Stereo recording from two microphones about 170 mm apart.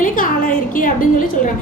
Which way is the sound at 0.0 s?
55° left (ahead or behind).